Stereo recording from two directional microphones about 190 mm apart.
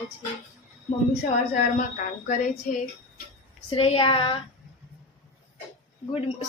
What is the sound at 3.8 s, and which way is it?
Speech, 30° left (ahead or behind).